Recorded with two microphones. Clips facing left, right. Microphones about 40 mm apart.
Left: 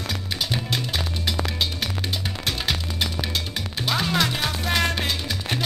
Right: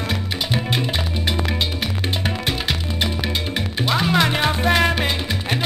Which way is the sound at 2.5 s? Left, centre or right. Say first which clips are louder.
Right 3 dB; centre.